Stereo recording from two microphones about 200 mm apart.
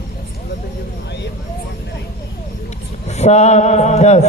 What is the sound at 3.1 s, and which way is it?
Speech, 35° left (ahead or behind).